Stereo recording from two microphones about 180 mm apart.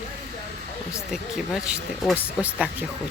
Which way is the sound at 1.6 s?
5° right (ahead or behind).